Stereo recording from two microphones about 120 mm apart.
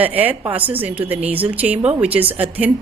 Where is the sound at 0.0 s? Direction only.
15° right (ahead or behind).